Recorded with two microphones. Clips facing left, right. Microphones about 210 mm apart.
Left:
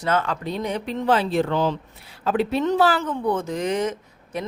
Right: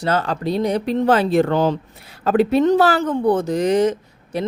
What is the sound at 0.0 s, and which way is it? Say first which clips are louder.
Speech: right 3 dB; 35° right (ahead or behind).